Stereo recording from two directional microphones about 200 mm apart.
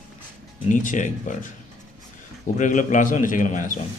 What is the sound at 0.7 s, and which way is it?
Speech, 40° left (ahead or behind).